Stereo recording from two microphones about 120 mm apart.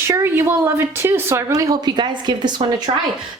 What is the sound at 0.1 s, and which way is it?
A woman's voice, 20° right (ahead or behind).